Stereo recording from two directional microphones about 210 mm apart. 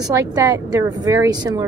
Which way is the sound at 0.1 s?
15° right (ahead or behind).